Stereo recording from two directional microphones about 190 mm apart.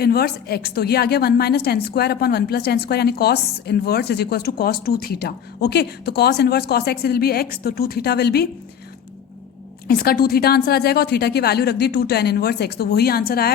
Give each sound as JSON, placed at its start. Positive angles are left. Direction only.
{"t": 0.0, "sound": "a woman's voice", "side_deg": 55}
{"t": 9.8, "sound": "a woman's voice", "side_deg": 55}